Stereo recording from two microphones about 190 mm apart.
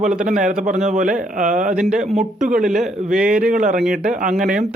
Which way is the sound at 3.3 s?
45° right (ahead or behind).